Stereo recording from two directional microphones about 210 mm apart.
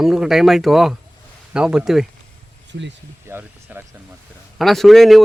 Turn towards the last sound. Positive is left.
turn(degrees=0)  # may be behind; listen again after turning